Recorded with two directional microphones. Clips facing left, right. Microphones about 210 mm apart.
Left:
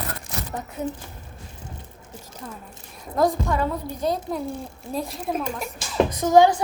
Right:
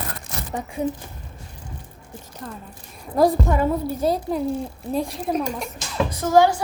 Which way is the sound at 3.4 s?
15° right (ahead or behind).